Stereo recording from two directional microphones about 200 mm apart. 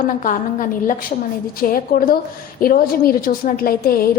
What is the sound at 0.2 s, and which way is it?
A woman's voice, 40° left (ahead or behind).